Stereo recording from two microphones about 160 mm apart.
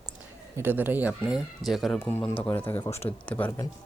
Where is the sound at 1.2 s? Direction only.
Centre (ahead or behind).